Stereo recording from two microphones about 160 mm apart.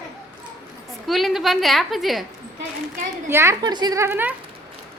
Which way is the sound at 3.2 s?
15° right (ahead or behind).